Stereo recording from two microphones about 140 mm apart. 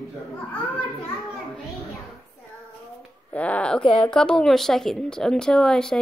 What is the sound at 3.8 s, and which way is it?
Speech, 35° left (ahead or behind).